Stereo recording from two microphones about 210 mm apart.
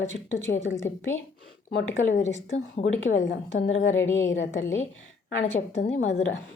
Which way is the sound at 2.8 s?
70° left (ahead or behind).